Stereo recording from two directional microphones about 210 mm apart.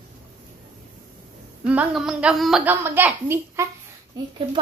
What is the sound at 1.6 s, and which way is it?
A woman's voice, 5° right (ahead or behind).